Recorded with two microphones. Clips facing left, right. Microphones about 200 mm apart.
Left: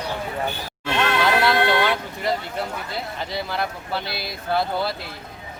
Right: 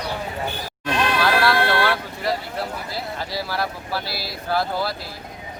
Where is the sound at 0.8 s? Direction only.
25° left (ahead or behind).